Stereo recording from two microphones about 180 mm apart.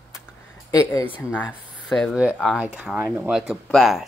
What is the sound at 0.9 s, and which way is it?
Speech, 15° left (ahead or behind).